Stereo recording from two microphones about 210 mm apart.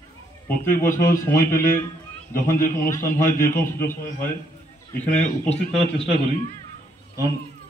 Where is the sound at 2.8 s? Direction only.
15° left (ahead or behind).